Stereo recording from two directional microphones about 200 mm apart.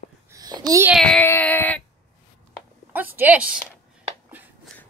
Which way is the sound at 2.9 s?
10° right (ahead or behind).